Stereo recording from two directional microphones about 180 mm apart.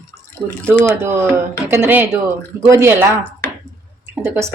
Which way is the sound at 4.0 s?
15° right (ahead or behind).